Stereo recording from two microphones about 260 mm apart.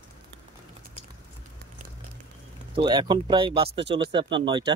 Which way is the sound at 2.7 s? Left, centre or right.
Centre.